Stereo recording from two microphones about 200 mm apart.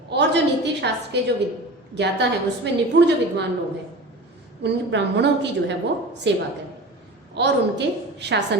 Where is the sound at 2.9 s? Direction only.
65° right (ahead or behind).